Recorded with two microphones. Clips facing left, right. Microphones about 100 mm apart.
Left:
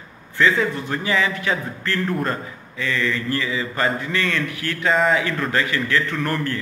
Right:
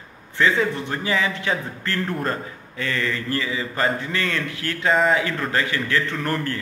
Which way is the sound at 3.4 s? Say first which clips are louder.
Left 1 dB; 25° right (ahead or behind).